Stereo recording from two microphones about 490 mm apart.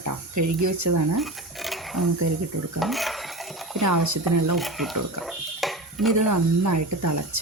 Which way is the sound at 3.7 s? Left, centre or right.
Right.